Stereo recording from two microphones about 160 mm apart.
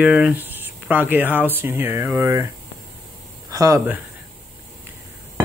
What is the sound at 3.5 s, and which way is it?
Speech, 20° right (ahead or behind).